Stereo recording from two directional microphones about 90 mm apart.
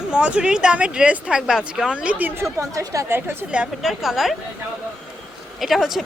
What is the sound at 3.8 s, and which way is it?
Speech, centre (ahead or behind).